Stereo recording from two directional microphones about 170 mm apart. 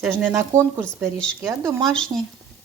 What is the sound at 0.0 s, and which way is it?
Speech, 10° right (ahead or behind).